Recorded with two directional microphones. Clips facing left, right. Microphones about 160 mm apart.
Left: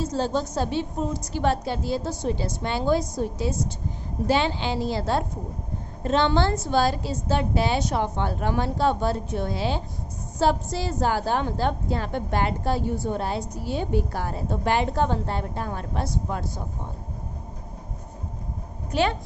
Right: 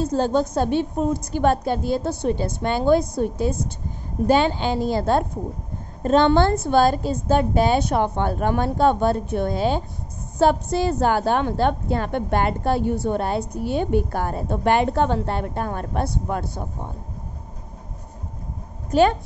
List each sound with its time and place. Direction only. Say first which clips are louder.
0.0 s a woman's voice: right 5 dB; 55° right (ahead or behind)
18.9 s a woman's voice: right 7 dB; 45° right (ahead or behind)